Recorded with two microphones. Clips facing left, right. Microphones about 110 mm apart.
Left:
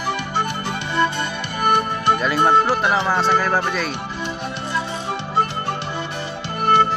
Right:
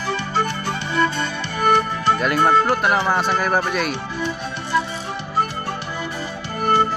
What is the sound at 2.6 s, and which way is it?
Speech, centre (ahead or behind).